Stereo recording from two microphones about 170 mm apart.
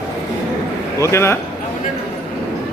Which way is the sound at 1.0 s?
15° left (ahead or behind).